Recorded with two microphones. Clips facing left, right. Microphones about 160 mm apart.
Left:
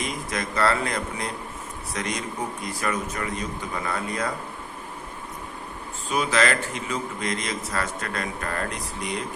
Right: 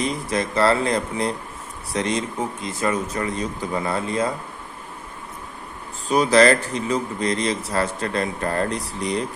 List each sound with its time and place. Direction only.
0.0 s speech: 30° right (ahead or behind)
6.1 s a man's voice: 35° right (ahead or behind)